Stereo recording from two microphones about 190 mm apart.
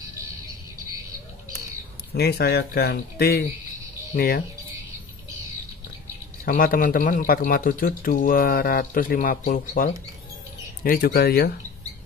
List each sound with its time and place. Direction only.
2.1 s speech: 55° left (ahead or behind)
6.4 s speech: 50° left (ahead or behind)